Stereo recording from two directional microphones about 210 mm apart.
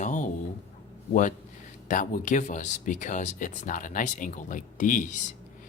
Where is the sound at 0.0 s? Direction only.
35° left (ahead or behind).